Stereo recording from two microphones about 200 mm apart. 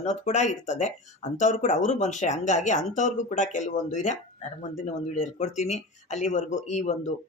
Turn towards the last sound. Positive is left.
turn(degrees=35)  # may be behind; listen again after turning